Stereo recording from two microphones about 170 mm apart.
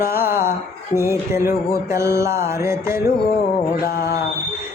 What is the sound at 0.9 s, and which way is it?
Mantra, 15° right (ahead or behind).